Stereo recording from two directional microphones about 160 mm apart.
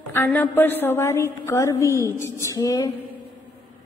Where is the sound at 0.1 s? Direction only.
10° left (ahead or behind).